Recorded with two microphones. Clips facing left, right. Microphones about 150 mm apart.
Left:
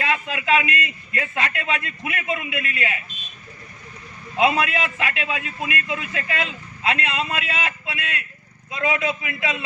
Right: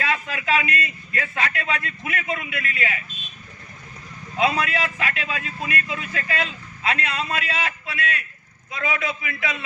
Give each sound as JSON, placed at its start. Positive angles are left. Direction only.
{"t": 0.0, "sound": "a man's voice", "side_deg": 20}
{"t": 4.4, "sound": "a man's voice", "side_deg": 20}